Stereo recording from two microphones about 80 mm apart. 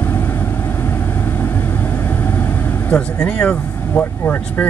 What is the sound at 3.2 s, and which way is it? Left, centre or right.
Speech, centre.